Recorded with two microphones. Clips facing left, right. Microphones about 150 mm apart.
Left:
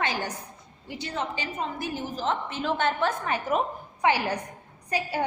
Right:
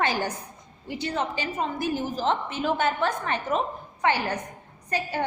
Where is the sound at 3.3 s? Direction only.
10° left (ahead or behind).